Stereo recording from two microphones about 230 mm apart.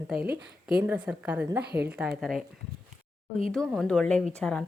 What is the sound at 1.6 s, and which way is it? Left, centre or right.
Speech, right.